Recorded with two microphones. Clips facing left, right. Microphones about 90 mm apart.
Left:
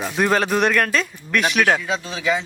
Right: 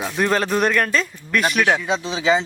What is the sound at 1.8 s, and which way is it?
Speech, 20° right (ahead or behind).